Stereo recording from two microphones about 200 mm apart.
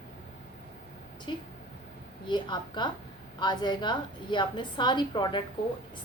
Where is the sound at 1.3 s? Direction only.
25° left (ahead or behind).